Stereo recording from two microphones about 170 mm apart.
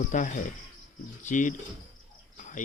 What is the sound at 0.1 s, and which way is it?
Speech, 50° left (ahead or behind).